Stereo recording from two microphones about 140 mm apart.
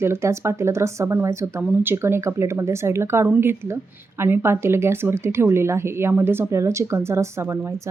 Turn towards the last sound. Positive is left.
turn(degrees=-20)  # may be behind; listen again after turning